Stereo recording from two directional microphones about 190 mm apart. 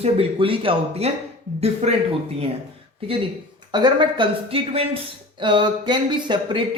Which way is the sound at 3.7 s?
25° right (ahead or behind).